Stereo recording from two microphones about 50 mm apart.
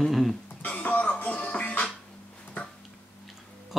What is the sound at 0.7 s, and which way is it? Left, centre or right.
Music, left.